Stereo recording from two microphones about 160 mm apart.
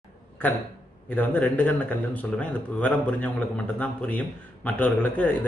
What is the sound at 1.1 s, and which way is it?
Speech, 10° left (ahead or behind).